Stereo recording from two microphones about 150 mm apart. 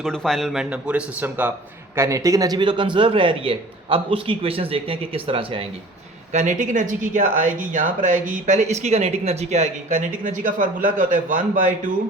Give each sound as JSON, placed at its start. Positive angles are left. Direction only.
{"t": 0.0, "sound": "a man's voice", "side_deg": 5}
{"t": 2.0, "sound": "a man's voice", "side_deg": -20}
{"t": 6.3, "sound": "speech", "side_deg": -55}